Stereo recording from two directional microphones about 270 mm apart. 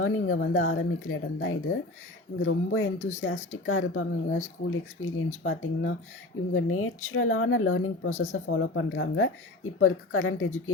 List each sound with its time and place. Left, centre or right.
0.3 s speech: left